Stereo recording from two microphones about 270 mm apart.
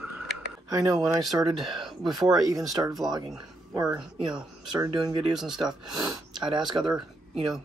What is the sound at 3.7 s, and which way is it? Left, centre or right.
Speech, centre.